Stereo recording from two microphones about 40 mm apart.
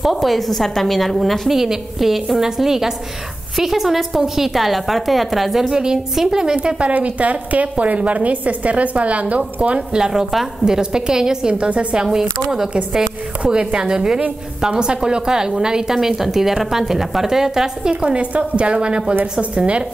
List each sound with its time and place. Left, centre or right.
0.0 s a woman's voice: centre
1.5 s a woman's voice: centre
6.2 s a woman's voice: centre
6.9 s a woman's voice: right
9.9 s a woman's voice: centre
11.5 s a woman's voice: right
12.0 s a woman's voice: centre
13.4 s a woman's voice: right
18.0 s a woman's voice: right